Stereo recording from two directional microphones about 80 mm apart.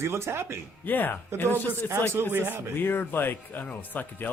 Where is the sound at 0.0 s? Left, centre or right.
Right.